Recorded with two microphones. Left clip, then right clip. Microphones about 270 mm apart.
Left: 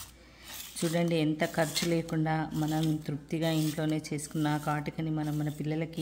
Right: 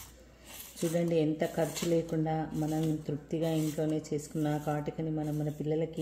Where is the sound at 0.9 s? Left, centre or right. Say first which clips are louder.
Even; left.